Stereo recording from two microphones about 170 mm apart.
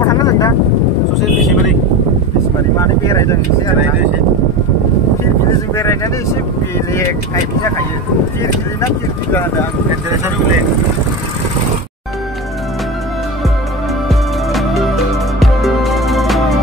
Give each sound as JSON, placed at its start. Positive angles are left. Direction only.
{"t": 0.1, "sound": "vehicle", "side_deg": 20}
{"t": 2.8, "sound": "speech", "side_deg": 20}
{"t": 6.9, "sound": "speech", "side_deg": 15}
{"t": 8.4, "sound": "speech", "side_deg": 15}
{"t": 14.0, "sound": "music", "side_deg": 0}